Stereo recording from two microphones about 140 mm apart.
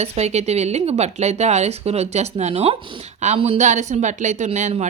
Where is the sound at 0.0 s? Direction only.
50° right (ahead or behind).